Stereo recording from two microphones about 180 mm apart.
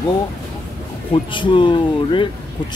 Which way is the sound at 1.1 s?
25° left (ahead or behind).